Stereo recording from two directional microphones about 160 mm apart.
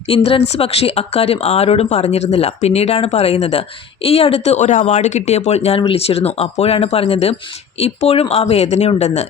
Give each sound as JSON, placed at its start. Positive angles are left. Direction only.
{"t": 0.1, "sound": "speech", "side_deg": 35}